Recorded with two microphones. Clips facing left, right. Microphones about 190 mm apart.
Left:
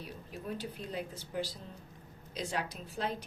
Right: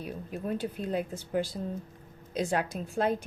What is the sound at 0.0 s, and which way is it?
A woman's voice, 55° right (ahead or behind).